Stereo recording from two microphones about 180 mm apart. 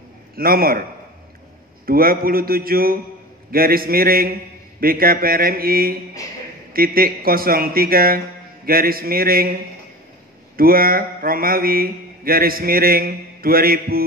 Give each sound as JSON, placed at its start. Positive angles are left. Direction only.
{"t": 0.4, "sound": "mantra", "side_deg": -55}
{"t": 1.9, "sound": "mantra", "side_deg": -55}